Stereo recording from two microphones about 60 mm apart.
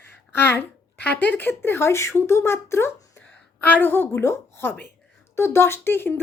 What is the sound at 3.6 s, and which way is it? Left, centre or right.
Speech, left.